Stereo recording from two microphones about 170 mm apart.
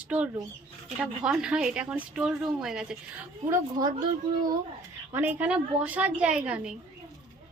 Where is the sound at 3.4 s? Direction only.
20° right (ahead or behind).